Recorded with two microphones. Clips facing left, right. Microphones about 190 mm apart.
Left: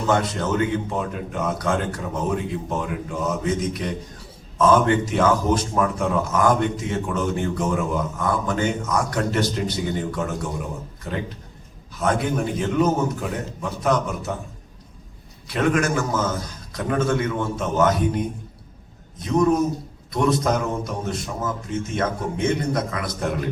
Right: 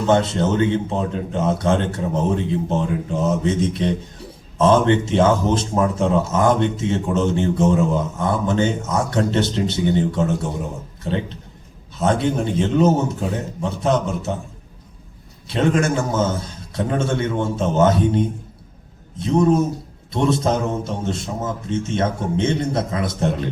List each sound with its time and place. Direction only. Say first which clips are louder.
0.1 s a man's voice: right 4 dB; 25° right (ahead or behind)
15.4 s a man's voice: right 2 dB; 25° right (ahead or behind)